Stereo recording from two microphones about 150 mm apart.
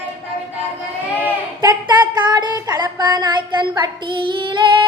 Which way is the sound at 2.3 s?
30° right (ahead or behind).